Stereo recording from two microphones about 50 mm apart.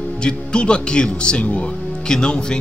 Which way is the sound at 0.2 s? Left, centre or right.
Centre.